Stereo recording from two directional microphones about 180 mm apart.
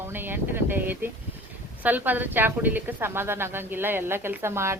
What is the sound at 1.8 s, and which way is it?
A woman's voice, 10° right (ahead or behind).